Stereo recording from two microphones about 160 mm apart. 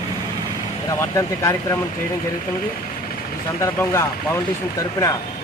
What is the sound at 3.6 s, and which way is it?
Speech, 15° left (ahead or behind).